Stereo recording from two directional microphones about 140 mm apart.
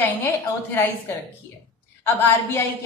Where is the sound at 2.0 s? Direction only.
15° left (ahead or behind).